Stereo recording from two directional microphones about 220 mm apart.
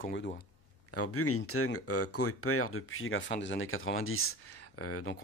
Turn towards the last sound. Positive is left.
turn(degrees=90)